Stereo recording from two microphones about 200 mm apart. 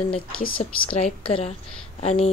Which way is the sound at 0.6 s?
30° left (ahead or behind).